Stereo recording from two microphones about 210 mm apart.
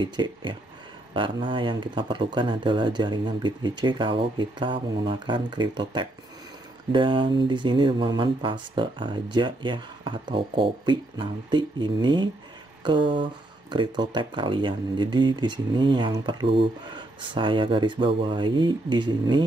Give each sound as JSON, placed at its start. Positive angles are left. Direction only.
{"t": 0.0, "sound": "speech", "side_deg": -20}